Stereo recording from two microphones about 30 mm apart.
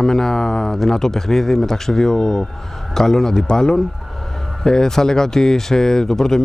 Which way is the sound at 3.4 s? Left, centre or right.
Left.